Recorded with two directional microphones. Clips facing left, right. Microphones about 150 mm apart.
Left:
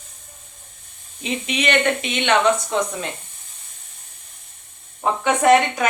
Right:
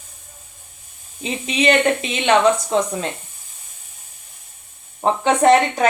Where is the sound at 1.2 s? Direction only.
30° right (ahead or behind).